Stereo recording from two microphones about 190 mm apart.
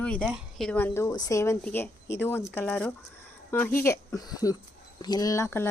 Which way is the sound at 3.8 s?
15° left (ahead or behind).